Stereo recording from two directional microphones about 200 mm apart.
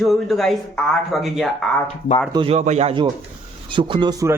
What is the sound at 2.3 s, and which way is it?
Speech, 30° right (ahead or behind).